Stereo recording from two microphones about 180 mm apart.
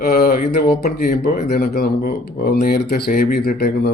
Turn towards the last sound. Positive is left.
turn(degrees=60)  # may be behind; listen again after turning